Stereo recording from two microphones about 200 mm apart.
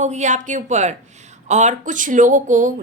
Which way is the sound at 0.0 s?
35° right (ahead or behind).